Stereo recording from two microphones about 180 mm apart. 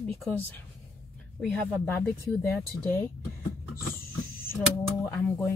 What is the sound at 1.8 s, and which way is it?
Speech, 10° left (ahead or behind).